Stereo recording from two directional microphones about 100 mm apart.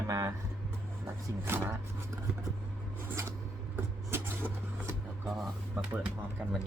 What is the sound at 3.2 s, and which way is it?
Filing, 30° right (ahead or behind).